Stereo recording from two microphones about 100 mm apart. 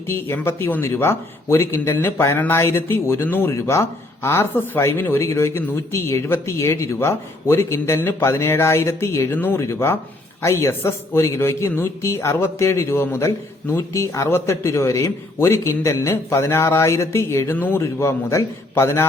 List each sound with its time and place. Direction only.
0.1 s speech: 25° left (ahead or behind)